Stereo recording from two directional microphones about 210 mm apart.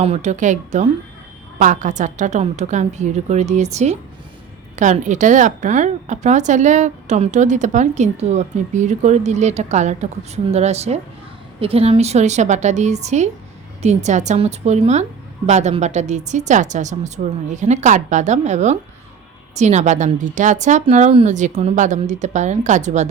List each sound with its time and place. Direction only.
0.0 s a woman's voice: 30° right (ahead or behind)